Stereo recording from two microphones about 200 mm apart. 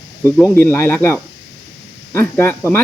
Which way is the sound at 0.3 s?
15° left (ahead or behind).